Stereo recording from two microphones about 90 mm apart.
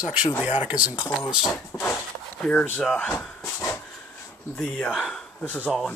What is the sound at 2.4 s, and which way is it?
Speech, 15° left (ahead or behind).